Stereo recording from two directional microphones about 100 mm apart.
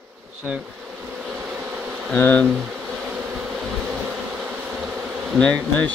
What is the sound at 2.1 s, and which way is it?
Speech, 15° left (ahead or behind).